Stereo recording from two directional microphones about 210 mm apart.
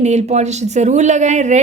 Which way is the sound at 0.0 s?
30° right (ahead or behind).